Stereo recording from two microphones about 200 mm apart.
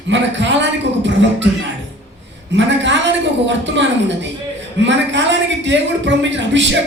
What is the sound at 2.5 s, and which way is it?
A man's voice, 65° right (ahead or behind).